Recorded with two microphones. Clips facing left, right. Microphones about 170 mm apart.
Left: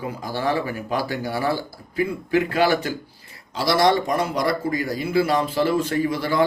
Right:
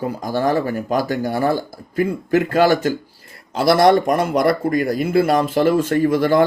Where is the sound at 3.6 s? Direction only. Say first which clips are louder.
Right 5 dB; 55° right (ahead or behind).